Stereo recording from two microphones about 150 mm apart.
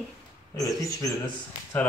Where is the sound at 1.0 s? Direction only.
25° left (ahead or behind).